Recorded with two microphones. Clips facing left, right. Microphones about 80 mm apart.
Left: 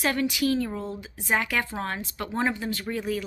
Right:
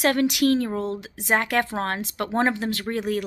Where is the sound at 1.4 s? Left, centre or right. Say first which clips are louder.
Right 4 dB; right.